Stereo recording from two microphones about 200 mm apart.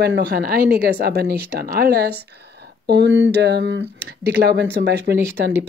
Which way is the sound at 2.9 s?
65° right (ahead or behind).